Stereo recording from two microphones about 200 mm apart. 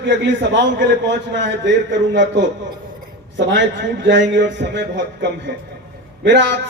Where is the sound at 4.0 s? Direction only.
65° right (ahead or behind).